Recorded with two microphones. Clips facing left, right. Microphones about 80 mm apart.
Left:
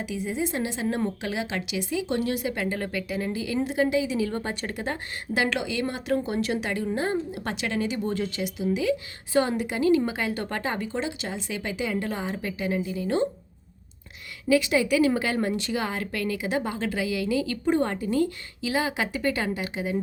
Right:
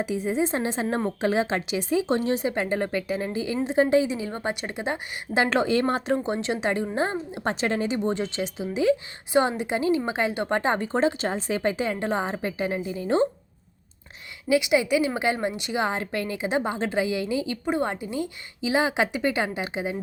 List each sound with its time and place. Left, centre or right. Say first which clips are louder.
0.0 s a woman's voice: right 4 dB; right
6.1 s a woman's voice: even; right
14.5 s a woman's voice: right 1 dB; centre